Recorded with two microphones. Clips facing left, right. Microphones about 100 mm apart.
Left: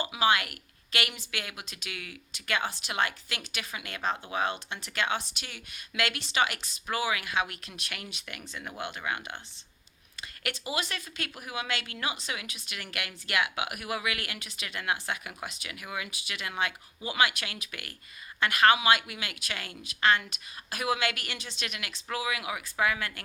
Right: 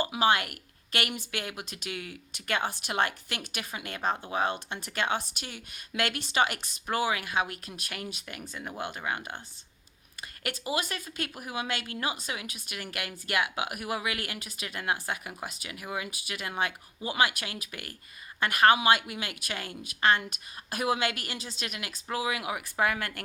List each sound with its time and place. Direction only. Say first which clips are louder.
0.1 s a woman's voice: right 1 dB; 40° right (ahead or behind)
2.6 s a woman's voice: right 2 dB; 50° right (ahead or behind)
10.4 s a woman's voice: right 2 dB; 40° right (ahead or behind)
20.8 s a woman's voice: right 1 dB; 30° right (ahead or behind); by 23.2 s 50° right (ahead or behind)